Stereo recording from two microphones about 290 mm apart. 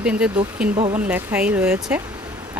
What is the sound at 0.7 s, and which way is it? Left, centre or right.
Speech, centre.